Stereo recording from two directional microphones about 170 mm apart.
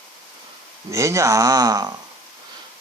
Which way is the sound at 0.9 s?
15° right (ahead or behind).